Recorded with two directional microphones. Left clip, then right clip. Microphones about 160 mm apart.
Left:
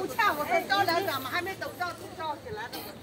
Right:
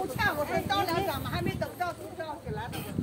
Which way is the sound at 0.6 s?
10° left (ahead or behind).